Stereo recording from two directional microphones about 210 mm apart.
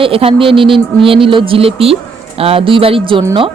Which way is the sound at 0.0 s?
25° right (ahead or behind).